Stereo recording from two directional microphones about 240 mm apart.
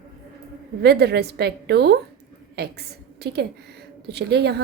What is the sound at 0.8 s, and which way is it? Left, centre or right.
A woman's voice, right.